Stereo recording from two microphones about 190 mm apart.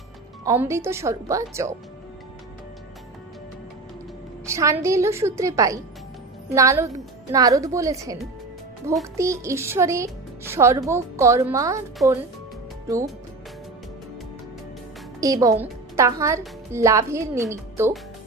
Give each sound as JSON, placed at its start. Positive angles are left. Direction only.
{"t": 0.4, "sound": "a child's voice", "side_deg": -15}
{"t": 4.4, "sound": "a child's voice", "side_deg": -15}
{"t": 9.1, "sound": "a child's voice", "side_deg": -15}
{"t": 15.2, "sound": "a woman's voice", "side_deg": -20}